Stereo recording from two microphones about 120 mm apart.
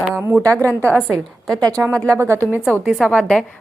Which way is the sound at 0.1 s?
20° right (ahead or behind).